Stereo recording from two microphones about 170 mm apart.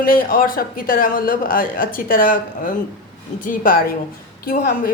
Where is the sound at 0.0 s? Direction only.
55° left (ahead or behind).